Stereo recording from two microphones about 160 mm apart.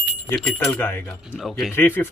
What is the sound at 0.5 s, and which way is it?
Speech, 15° left (ahead or behind).